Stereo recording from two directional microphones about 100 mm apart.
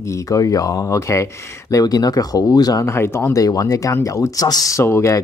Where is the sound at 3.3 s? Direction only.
35° left (ahead or behind).